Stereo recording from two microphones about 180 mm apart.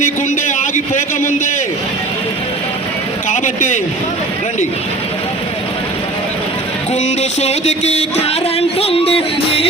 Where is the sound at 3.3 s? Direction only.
45° left (ahead or behind).